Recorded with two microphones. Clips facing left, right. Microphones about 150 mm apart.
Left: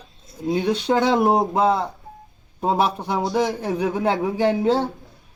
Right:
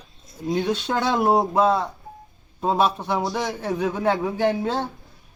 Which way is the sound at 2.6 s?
15° left (ahead or behind).